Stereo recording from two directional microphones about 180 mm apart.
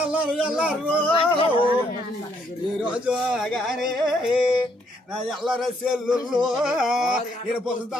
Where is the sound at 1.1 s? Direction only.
30° left (ahead or behind).